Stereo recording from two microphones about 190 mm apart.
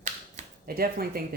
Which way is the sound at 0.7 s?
50° right (ahead or behind).